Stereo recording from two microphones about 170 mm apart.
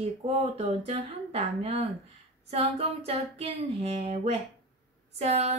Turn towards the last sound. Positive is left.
turn(degrees=-40)  # may be behind; listen again after turning